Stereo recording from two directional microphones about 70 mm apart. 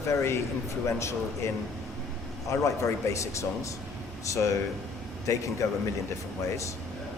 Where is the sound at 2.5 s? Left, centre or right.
Left.